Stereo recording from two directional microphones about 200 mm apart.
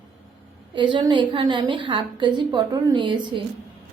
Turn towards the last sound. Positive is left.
turn(degrees=-25)  # may be behind; listen again after turning